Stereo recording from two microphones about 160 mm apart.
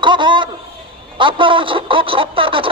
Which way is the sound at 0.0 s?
30° right (ahead or behind).